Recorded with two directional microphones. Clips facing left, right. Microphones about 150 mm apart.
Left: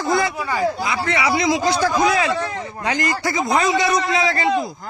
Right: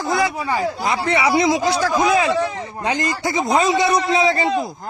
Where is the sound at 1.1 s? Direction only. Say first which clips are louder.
Right 2 dB; 15° right (ahead or behind).